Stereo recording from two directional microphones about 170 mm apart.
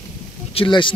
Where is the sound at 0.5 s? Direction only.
30° left (ahead or behind).